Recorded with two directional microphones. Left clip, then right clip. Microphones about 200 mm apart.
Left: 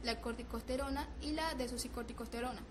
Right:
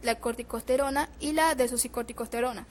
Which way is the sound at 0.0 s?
45° right (ahead or behind).